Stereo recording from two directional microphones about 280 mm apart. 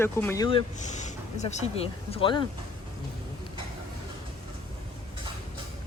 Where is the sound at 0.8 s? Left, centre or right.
Left.